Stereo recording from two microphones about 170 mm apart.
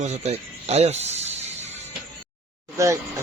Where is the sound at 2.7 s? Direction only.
20° right (ahead or behind).